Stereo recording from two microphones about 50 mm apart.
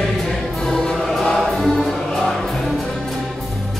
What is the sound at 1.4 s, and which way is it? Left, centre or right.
Music, centre.